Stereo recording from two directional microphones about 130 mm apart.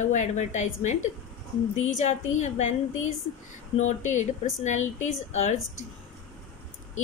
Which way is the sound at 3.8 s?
65° left (ahead or behind).